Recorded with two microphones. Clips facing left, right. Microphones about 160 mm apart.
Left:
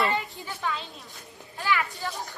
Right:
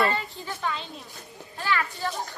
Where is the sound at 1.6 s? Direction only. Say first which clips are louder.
Even; 15° left (ahead or behind).